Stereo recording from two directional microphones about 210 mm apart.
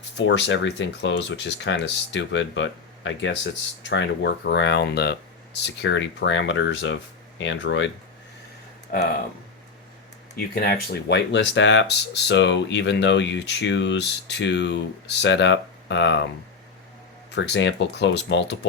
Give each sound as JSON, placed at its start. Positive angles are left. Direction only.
{"t": 0.2, "sound": "speech", "side_deg": 55}
{"t": 10.5, "sound": "speech", "side_deg": 50}
{"t": 17.3, "sound": "speech", "side_deg": 55}